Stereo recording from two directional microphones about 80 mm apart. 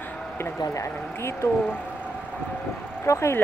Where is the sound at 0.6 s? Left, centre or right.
Left.